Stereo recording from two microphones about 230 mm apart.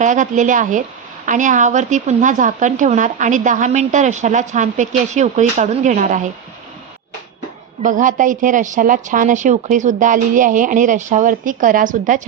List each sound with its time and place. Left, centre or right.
0.0 s a woman's voice: right
7.8 s a woman's voice: right